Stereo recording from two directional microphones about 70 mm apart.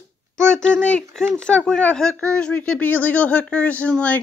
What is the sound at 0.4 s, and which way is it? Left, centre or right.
Speech, centre.